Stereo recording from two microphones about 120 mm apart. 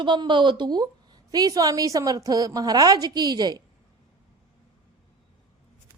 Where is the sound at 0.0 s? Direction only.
40° right (ahead or behind).